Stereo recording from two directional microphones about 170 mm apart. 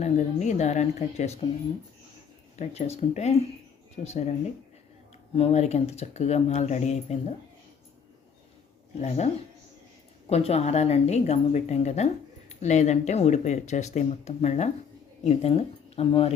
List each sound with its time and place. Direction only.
0.0 s speech: 45° left (ahead or behind)
2.6 s speech: 40° left (ahead or behind)
9.0 s speech: 40° left (ahead or behind)